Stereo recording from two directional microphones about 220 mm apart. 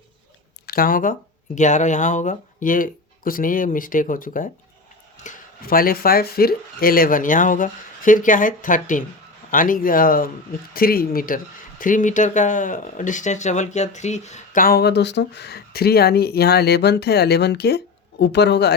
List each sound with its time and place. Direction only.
0.7 s speech: 40° left (ahead or behind)